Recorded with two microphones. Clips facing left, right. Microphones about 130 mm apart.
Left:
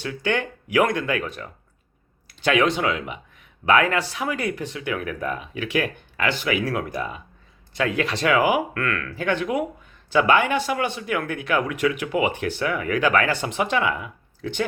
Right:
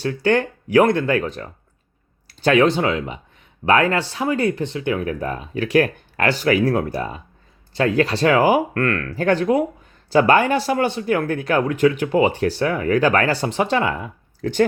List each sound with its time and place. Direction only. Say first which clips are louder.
0.0 s speech: right 6 dB; 35° right (ahead or behind)